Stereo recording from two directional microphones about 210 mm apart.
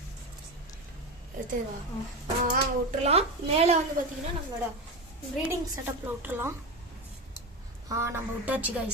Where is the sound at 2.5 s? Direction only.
35° right (ahead or behind).